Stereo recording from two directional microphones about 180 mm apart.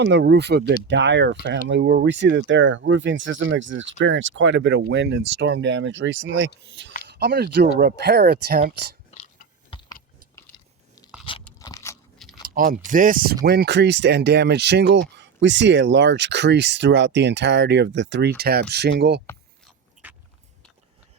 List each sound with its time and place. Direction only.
0.0 s speech: 70° right (ahead or behind); by 6.5 s 85° right
7.1 s speech: 65° right (ahead or behind)
9.0 s a sound: 40° left (ahead or behind)
9.6 s keys jangling: 25° left (ahead or behind)
11.3 s crunch: 30° left (ahead or behind)
11.6 s crunch: 15° left (ahead or behind)
12.4 s speech: 55° right (ahead or behind)
15.1 s speech: 80° right
20.0 s a sound: 10° right (ahead or behind)